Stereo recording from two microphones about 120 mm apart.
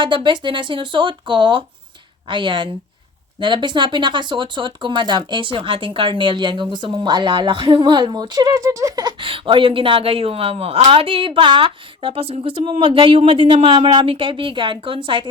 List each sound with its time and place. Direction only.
0.0 s speech: 45° right (ahead or behind)
9.2 s speech: 45° right (ahead or behind)